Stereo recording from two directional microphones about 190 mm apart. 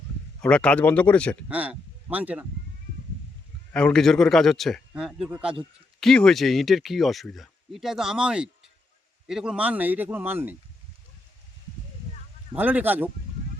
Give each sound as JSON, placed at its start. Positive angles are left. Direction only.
{"t": 0.4, "sound": "speech", "side_deg": 5}
{"t": 1.5, "sound": "speech", "side_deg": -5}
{"t": 3.7, "sound": "a man's voice", "side_deg": 5}
{"t": 12.5, "sound": "a man's voice", "side_deg": -10}